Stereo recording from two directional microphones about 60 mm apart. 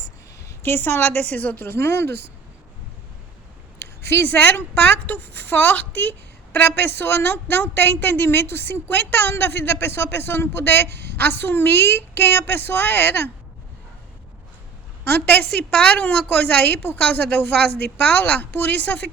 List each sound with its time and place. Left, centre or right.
0.6 s a woman's voice: left
4.1 s a woman's voice: left
15.0 s a woman's voice: left
15.7 s a woman's voice: left